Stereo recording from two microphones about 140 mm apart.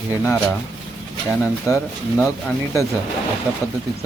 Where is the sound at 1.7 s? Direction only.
25° left (ahead or behind).